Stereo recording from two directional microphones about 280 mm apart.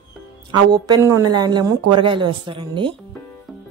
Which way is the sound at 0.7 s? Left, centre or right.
Centre.